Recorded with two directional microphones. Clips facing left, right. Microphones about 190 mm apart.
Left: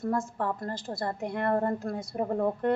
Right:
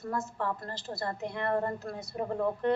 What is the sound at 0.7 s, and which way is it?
A woman's voice, 50° left (ahead or behind).